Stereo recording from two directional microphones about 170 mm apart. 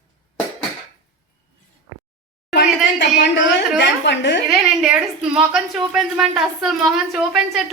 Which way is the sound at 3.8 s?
90° left.